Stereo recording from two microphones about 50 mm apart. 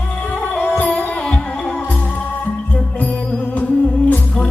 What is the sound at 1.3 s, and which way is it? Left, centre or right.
Music, centre.